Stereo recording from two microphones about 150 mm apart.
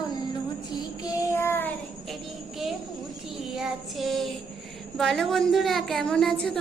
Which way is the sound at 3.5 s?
5° right (ahead or behind).